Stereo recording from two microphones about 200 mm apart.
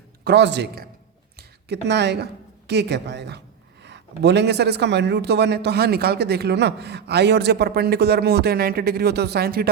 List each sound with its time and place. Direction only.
0.3 s a man's voice: 60° right (ahead or behind)
1.4 s a sound: 55° right (ahead or behind)
2.6 s a man's voice: 55° right (ahead or behind)